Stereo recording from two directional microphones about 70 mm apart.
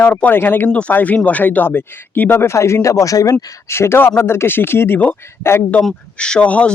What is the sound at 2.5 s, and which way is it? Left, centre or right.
Speech, left.